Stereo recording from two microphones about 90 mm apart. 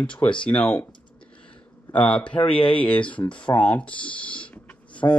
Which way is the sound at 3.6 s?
15° left (ahead or behind).